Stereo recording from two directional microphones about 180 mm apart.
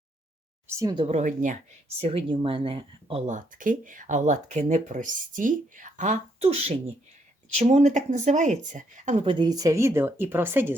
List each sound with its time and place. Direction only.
0.8 s speech: 20° right (ahead or behind)
1.0 s speech: 40° right (ahead or behind)
2.0 s speech: 35° right (ahead or behind)
9.2 s a woman's voice: 25° right (ahead or behind)